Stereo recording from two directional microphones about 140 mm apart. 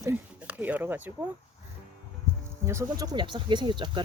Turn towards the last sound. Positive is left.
turn(degrees=-35)  # may be behind; listen again after turning